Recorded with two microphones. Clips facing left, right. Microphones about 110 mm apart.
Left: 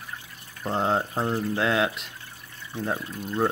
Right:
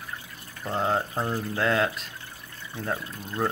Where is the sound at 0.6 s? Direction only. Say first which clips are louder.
Left 2 dB; 30° left (ahead or behind).